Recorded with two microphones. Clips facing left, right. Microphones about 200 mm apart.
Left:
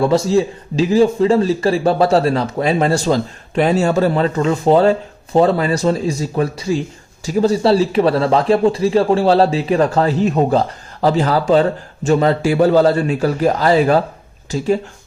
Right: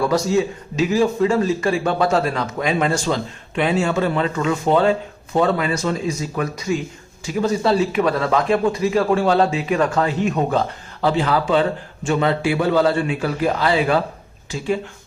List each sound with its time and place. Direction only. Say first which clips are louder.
0.0 s a man's voice: left 4 dB; 25° left (ahead or behind)